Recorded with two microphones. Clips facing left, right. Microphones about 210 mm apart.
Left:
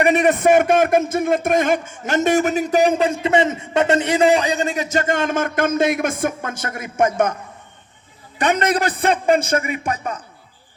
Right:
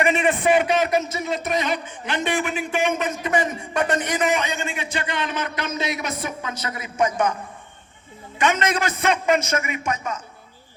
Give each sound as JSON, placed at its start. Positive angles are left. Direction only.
{"t": 0.0, "sound": "a man's voice", "side_deg": 40}
{"t": 8.4, "sound": "a man's voice", "side_deg": 35}